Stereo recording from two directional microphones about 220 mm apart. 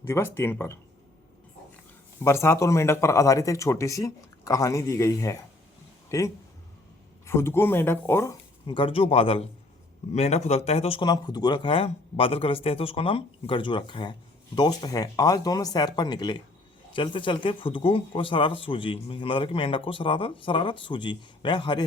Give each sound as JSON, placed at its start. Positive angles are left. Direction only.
{"t": 0.0, "sound": "speech", "side_deg": 10}
{"t": 2.2, "sound": "speech", "side_deg": 10}